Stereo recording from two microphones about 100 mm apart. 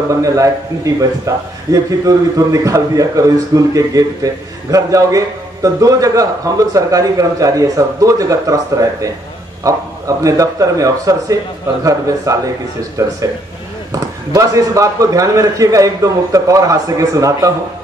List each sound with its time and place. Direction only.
0.1 s a man's voice: 35° right (ahead or behind)